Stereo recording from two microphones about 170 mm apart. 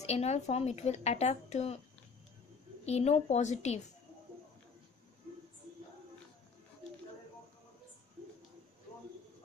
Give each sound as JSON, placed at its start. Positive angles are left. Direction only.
{"t": 0.0, "sound": "speech", "side_deg": 40}
{"t": 2.8, "sound": "speech", "side_deg": 40}